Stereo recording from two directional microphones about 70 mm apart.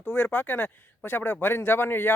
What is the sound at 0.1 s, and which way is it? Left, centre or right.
Speech, left.